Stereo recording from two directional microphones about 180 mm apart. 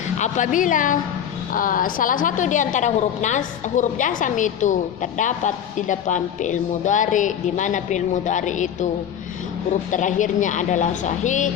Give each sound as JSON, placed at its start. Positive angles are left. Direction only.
{"t": 0.2, "sound": "a woman's voice", "side_deg": 45}
{"t": 9.9, "sound": "a woman's voice", "side_deg": 45}